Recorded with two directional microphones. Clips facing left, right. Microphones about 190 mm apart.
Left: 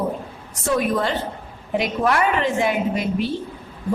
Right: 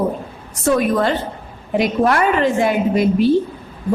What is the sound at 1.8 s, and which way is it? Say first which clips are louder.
A woman's voice: right 4 dB; 40° right (ahead or behind).